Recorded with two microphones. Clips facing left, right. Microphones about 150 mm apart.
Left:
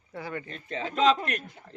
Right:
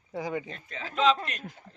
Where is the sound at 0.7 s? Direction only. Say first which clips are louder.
Left 2 dB; 35° left (ahead or behind).